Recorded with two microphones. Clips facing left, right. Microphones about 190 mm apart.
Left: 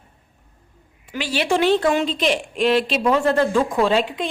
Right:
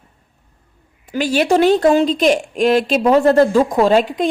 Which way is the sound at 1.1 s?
45° right (ahead or behind).